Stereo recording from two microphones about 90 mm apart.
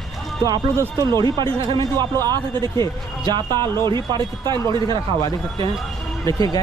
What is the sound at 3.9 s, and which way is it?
A man's voice, 55° right (ahead or behind).